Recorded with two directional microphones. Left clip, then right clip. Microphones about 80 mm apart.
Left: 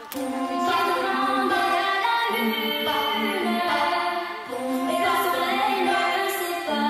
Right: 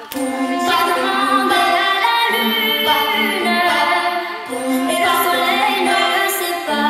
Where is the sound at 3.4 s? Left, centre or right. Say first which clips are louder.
Right 8 dB; right.